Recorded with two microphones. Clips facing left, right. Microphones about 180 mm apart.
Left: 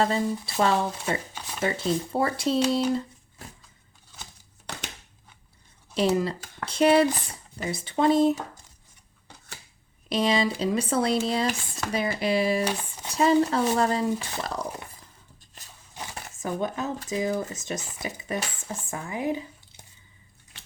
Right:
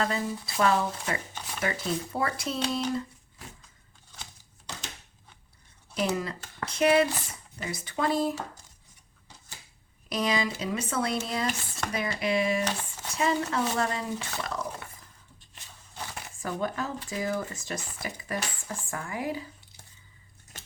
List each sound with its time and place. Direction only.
0.0 s speech: 30° left (ahead or behind)
1.3 s shuffling cards: 10° left (ahead or behind)
1.5 s speech: 25° left (ahead or behind)
5.9 s speech: 30° left (ahead or behind)
10.1 s speech: 30° left (ahead or behind)
12.6 s speech: 15° left (ahead or behind)
13.1 s speech: 35° left (ahead or behind)
16.1 s a sound: 20° left (ahead or behind)
17.1 s speech: 20° left (ahead or behind)
20.5 s tearing: 45° right (ahead or behind)